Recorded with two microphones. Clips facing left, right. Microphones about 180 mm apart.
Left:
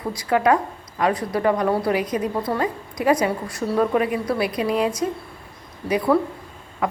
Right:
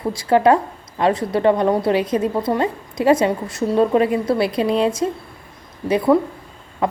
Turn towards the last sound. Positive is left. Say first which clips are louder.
# right 3 dB
turn(degrees=-30)  # may be behind; listen again after turning